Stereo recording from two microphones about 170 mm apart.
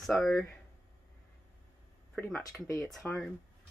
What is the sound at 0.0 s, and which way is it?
Speech, centre (ahead or behind).